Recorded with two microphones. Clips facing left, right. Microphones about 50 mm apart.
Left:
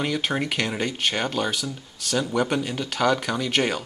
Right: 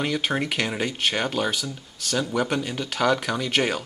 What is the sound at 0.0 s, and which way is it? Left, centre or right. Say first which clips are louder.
Speech: even; centre.